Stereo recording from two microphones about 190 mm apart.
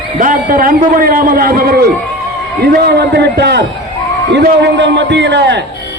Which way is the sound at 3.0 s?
60° right (ahead or behind).